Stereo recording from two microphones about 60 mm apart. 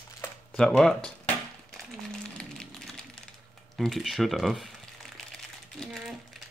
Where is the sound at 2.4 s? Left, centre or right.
Centre.